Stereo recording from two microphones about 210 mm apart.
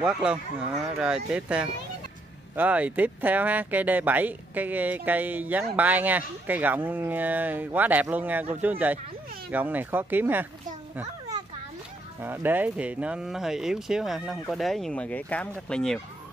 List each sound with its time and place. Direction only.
0.0 s speech: 5° right (ahead or behind)
11.0 s children playing: 15° right (ahead or behind)
12.2 s speech: 10° right (ahead or behind)